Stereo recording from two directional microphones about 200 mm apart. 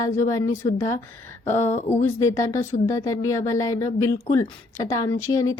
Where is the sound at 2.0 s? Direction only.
15° left (ahead or behind).